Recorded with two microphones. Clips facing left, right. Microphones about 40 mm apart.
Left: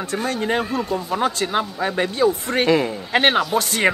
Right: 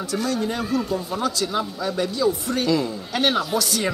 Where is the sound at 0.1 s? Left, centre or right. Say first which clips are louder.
Left 3 dB; left.